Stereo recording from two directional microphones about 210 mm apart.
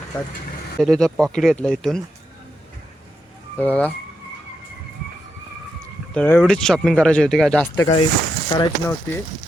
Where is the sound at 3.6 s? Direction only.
5° left (ahead or behind).